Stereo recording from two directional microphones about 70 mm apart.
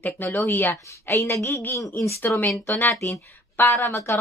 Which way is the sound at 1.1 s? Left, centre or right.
Left.